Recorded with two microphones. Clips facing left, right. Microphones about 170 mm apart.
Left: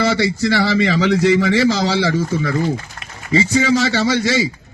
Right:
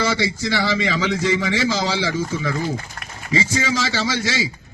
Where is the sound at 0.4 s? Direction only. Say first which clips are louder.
Left 6 dB; 60° left (ahead or behind).